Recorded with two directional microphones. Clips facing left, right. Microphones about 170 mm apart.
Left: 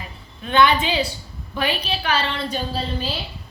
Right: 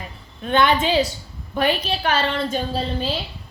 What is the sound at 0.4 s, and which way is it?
A woman's voice, 50° right (ahead or behind).